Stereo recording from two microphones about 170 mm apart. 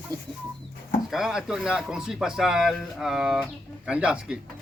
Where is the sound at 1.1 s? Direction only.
5° right (ahead or behind).